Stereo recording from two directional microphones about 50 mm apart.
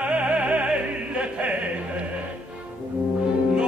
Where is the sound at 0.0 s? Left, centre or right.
Right.